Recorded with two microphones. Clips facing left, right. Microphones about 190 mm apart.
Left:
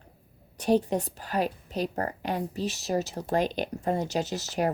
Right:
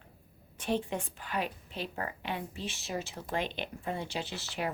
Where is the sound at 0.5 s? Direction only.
40° left (ahead or behind).